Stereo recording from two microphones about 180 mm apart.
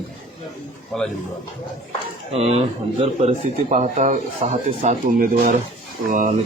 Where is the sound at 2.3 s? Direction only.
35° right (ahead or behind).